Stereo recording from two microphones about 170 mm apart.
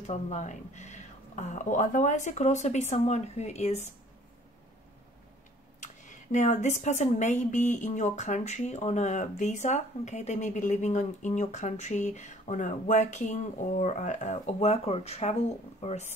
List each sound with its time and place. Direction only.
0.0 s speech: 40° left (ahead or behind)
5.8 s speech: 45° left (ahead or behind)